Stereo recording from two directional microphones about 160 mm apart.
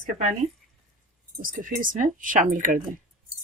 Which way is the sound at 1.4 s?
60° right (ahead or behind).